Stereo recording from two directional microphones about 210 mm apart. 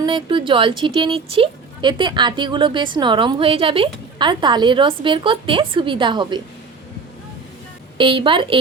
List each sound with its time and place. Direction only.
0.0 s speech: 25° right (ahead or behind)
7.9 s speech: 25° right (ahead or behind)